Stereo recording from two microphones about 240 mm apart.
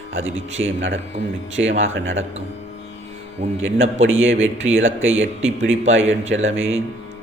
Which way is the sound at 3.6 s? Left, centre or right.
Right.